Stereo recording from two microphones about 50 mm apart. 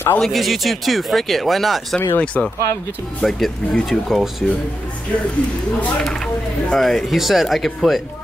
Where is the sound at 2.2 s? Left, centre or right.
Left.